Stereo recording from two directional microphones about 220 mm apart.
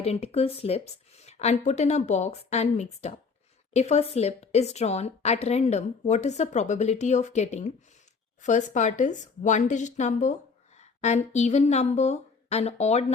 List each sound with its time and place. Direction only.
0.0 s speech: 30° left (ahead or behind)